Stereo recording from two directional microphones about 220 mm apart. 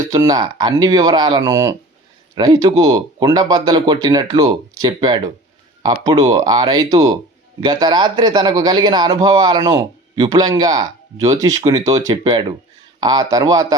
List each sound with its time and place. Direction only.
0.1 s a man's voice: 15° right (ahead or behind)